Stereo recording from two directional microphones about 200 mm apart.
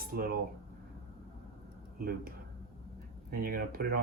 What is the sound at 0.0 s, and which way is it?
Speech, 45° right (ahead or behind).